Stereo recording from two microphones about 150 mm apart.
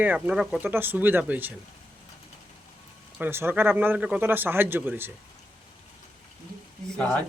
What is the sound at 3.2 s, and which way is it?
Speech, 15° right (ahead or behind).